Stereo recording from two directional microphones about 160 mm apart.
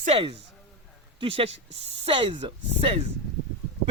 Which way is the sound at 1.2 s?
35° right (ahead or behind).